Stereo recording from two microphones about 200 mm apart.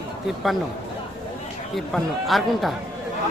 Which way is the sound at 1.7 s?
Centre (ahead or behind).